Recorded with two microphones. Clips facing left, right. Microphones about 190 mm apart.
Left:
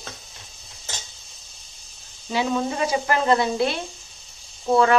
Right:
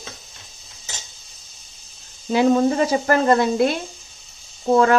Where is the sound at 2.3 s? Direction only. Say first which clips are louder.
Right 7 dB; 45° right (ahead or behind).